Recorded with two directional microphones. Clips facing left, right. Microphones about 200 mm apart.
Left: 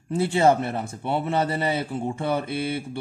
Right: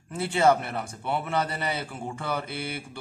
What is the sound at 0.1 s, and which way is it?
A man's voice, 25° left (ahead or behind).